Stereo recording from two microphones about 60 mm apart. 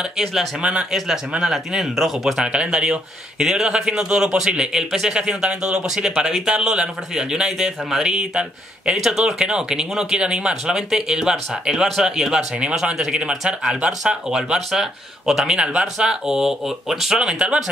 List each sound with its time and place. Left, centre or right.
0.2 s speech: centre
0.6 s speech: centre
0.9 s speech: centre
2.4 s speech: centre